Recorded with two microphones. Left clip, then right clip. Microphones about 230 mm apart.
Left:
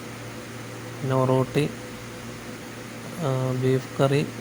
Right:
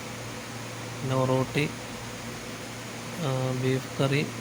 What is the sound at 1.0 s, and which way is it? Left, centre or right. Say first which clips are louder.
Speech: left 4 dB; centre.